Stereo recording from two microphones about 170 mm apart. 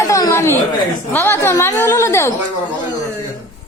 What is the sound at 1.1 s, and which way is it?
A woman's voice, 10° left (ahead or behind).